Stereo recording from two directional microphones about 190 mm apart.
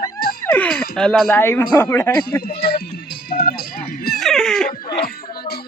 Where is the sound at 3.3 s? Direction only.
50° left (ahead or behind).